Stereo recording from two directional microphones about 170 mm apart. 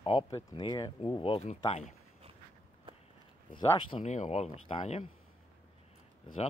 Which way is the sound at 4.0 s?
45° left (ahead or behind).